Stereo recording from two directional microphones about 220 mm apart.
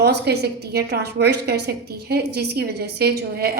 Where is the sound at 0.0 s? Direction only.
45° right (ahead or behind).